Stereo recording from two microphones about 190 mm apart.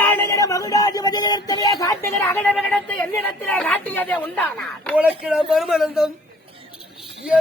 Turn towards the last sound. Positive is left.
turn(degrees=-5)  # may be behind; listen again after turning